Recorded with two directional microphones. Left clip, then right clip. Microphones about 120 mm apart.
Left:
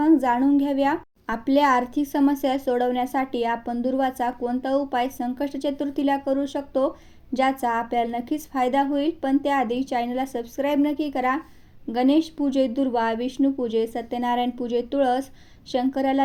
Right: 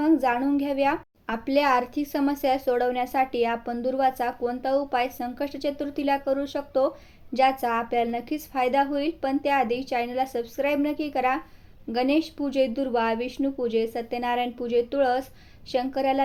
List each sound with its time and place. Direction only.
0.0 s a child's voice: 35° left (ahead or behind)